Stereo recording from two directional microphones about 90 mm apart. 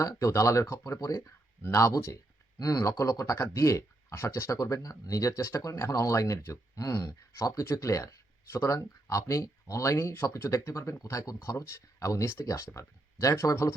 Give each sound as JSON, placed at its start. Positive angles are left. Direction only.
{"t": 0.0, "sound": "speech", "side_deg": 35}